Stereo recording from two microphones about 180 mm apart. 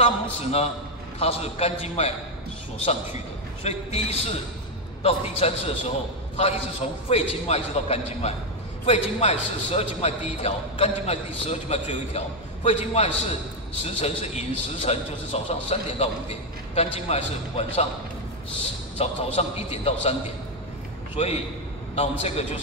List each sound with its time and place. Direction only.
0.0 s a man's voice: 35° left (ahead or behind)
3.6 s a man's voice: 35° left (ahead or behind)
18.9 s a man's voice: 35° left (ahead or behind)